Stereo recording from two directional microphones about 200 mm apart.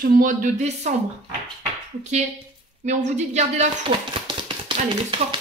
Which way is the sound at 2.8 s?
35° right (ahead or behind).